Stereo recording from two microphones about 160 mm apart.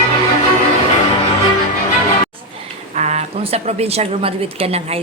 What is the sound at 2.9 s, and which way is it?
A woman's voice, 45° right (ahead or behind).